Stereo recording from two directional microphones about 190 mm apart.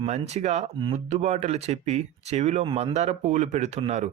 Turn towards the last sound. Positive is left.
turn(degrees=-35)  # may be behind; listen again after turning